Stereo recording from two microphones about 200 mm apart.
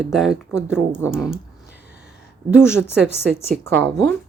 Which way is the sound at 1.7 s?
55° left (ahead or behind).